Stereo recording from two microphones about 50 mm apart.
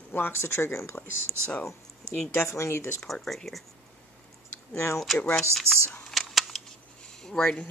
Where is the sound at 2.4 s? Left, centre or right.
Left.